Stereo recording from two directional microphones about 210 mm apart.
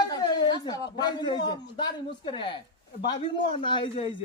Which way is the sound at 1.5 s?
20° left (ahead or behind).